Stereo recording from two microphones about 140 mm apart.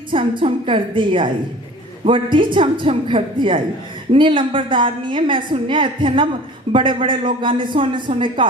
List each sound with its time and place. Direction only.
0.1 s a woman's voice: 40° right (ahead or behind)